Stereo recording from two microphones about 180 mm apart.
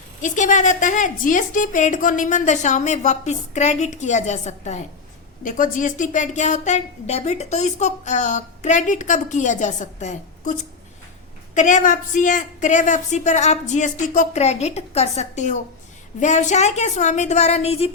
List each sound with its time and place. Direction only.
0.2 s a woman's voice: 45° left (ahead or behind)